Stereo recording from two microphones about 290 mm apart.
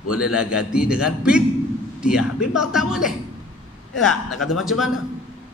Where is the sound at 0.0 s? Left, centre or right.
Left.